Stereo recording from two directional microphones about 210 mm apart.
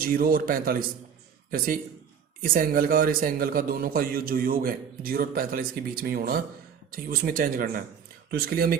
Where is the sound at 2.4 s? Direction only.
40° right (ahead or behind).